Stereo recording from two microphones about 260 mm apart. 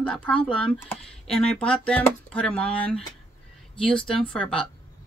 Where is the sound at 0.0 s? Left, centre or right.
Centre.